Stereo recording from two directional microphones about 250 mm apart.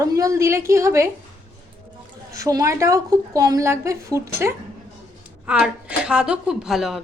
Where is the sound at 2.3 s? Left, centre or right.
Centre.